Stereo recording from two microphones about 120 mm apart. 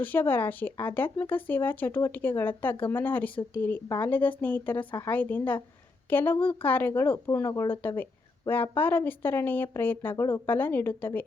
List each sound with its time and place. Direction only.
0.0 s speech: 15° left (ahead or behind)